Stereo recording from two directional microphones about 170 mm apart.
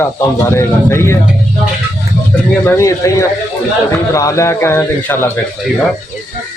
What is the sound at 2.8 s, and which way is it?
A man's voice, 20° left (ahead or behind).